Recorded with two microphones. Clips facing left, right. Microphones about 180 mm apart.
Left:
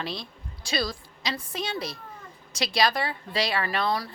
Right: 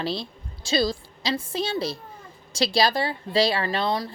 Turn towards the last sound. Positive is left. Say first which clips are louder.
# right 2 dB
turn(degrees=-25)  # may be behind; listen again after turning